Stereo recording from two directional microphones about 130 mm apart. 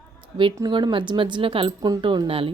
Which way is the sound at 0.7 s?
40° right (ahead or behind).